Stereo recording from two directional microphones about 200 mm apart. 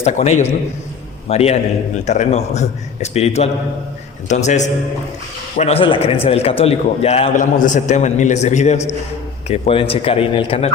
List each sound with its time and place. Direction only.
0.0 s a man's voice: 35° left (ahead or behind)